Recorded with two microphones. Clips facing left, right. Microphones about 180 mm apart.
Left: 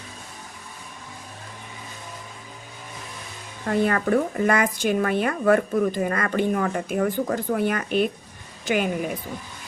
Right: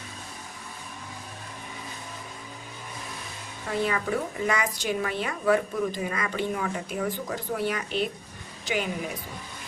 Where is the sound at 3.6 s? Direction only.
55° left (ahead or behind).